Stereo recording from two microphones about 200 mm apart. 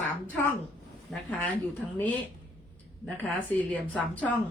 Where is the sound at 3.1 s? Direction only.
10° left (ahead or behind).